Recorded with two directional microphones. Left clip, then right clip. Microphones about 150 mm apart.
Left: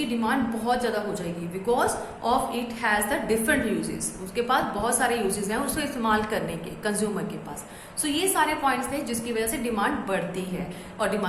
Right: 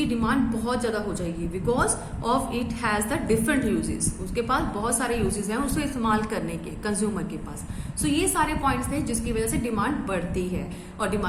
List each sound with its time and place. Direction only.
0.2 s a woman's voice: 45° right (ahead or behind)